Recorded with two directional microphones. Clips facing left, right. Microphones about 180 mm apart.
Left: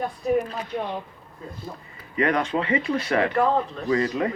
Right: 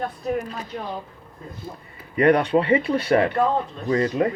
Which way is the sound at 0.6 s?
35° right (ahead or behind).